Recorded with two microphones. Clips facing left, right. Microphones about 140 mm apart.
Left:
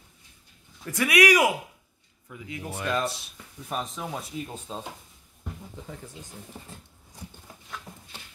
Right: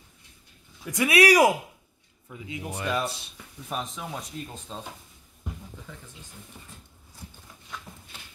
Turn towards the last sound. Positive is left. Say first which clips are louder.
# left 4 dB
turn(degrees=35)  # may be behind; listen again after turning